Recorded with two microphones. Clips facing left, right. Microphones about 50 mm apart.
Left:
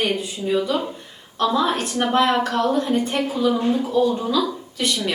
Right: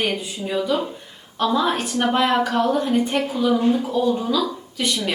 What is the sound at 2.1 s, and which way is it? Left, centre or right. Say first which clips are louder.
A woman's voice: left 1 dB; centre.